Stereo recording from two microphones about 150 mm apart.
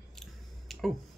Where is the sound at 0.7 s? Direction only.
Centre (ahead or behind).